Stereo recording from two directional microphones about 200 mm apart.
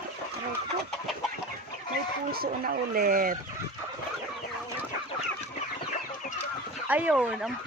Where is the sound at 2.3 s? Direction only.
45° right (ahead or behind).